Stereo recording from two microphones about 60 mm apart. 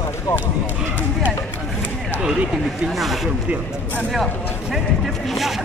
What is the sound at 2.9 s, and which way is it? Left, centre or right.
Speech, centre.